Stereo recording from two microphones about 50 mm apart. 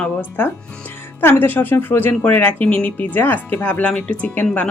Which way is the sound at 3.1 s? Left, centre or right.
Left.